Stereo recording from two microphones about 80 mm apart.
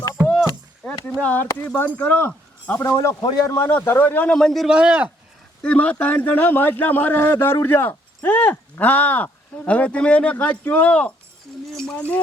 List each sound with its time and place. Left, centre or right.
1.2 s a man's voice: left
2.8 s a man's voice: left
3.6 s a man's voice: left
4.3 s a man's voice: centre
4.7 s a man's voice: centre
5.6 s a man's voice: centre
11.7 s a sound: centre